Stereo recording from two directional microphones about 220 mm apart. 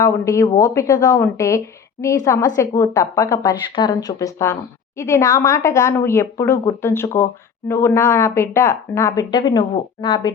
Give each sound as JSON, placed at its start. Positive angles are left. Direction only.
{"t": 0.0, "sound": "speech", "side_deg": 15}